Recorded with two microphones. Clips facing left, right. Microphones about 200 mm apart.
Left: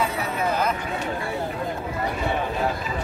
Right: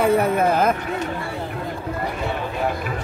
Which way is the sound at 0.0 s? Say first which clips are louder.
Right 8 dB; 55° right (ahead or behind).